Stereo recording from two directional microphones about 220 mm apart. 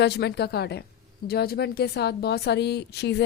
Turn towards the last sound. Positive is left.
turn(degrees=50)  # may be behind; listen again after turning